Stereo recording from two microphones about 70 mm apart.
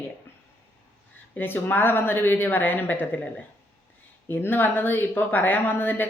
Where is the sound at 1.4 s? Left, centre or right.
Left.